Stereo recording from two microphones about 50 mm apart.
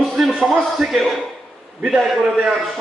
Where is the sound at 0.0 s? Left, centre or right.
Centre.